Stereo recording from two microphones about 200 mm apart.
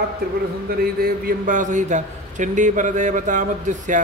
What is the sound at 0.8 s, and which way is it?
A man's voice, 45° right (ahead or behind).